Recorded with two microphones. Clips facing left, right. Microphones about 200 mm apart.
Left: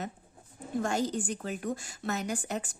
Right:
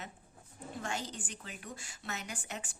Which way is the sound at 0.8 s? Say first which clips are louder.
Left 11 dB; 45° left (ahead or behind).